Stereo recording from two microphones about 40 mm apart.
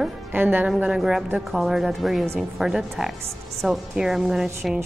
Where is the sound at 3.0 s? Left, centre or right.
Centre.